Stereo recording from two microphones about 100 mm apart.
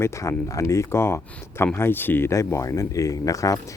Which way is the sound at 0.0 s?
30° left (ahead or behind).